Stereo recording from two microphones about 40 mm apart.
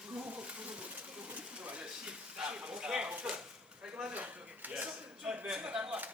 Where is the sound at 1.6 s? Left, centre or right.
Right.